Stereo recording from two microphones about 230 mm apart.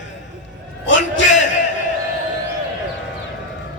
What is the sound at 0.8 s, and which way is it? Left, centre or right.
Speech, left.